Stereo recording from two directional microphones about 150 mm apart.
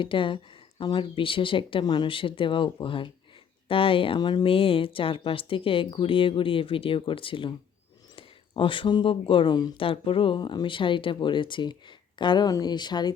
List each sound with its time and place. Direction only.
0.0 s speech: 35° left (ahead or behind)